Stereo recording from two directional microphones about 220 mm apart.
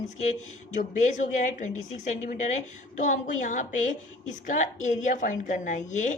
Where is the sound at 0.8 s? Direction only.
35° left (ahead or behind).